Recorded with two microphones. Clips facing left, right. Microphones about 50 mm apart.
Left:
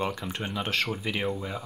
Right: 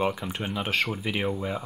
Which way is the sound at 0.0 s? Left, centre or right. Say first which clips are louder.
Right 3 dB; centre.